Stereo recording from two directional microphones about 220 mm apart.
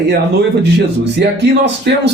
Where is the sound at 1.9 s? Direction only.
50° right (ahead or behind).